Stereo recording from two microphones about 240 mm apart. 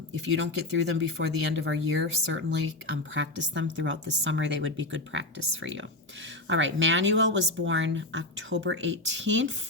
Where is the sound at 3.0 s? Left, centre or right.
Right.